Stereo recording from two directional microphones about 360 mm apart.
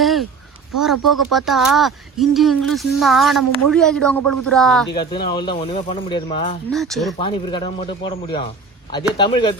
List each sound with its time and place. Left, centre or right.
0.0 s a sound: centre
0.8 s speech: centre
4.9 s speech: centre
6.7 s speech: centre
7.2 s speech: centre